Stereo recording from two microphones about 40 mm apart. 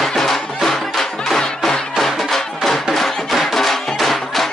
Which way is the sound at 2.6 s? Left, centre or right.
Centre.